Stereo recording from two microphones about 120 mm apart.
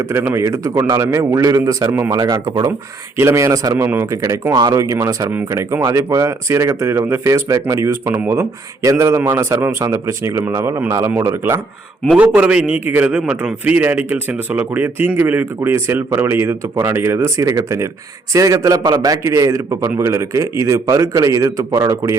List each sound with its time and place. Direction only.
0.0 s a man's voice: 20° right (ahead or behind)
12.1 s a man's voice: 10° right (ahead or behind); by 22.1 s 30° right (ahead or behind)